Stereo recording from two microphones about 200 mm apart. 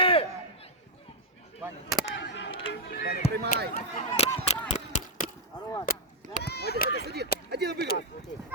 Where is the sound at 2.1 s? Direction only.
60° left (ahead or behind).